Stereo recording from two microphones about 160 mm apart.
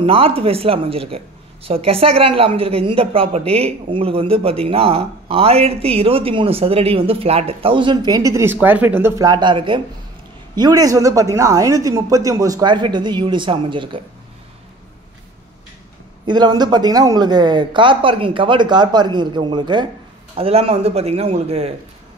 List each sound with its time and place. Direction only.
0.0 s speech: 35° right (ahead or behind)
16.3 s speech: 25° right (ahead or behind)